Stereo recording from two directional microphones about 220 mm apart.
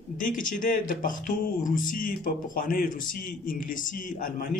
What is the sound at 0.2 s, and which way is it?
Speech, 35° left (ahead or behind).